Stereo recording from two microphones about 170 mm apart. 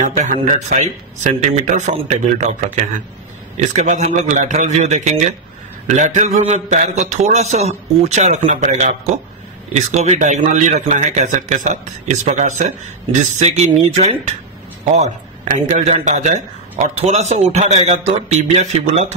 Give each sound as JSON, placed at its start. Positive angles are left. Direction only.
{"t": 0.0, "sound": "a man's voice", "side_deg": -45}
{"t": 15.5, "sound": "a man's voice", "side_deg": -40}